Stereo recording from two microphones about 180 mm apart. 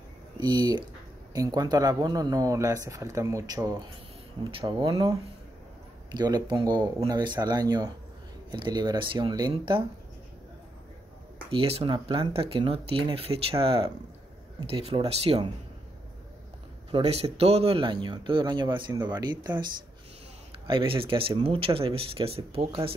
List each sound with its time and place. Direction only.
0.4 s speech: 25° right (ahead or behind)
6.1 s speech: 25° right (ahead or behind)
11.5 s speech: 30° right (ahead or behind)
16.9 s speech: 35° right (ahead or behind)
20.6 s speech: 30° right (ahead or behind)